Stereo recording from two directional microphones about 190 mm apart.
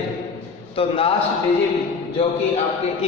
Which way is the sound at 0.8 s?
30° left (ahead or behind).